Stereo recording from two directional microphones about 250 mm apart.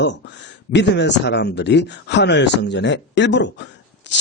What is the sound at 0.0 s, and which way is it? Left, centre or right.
Speech, left.